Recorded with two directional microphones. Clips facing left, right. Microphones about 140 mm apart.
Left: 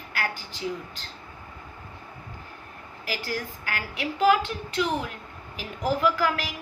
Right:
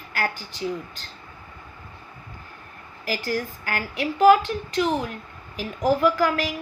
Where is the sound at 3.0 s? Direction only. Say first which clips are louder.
Right 5 dB; 45° right (ahead or behind).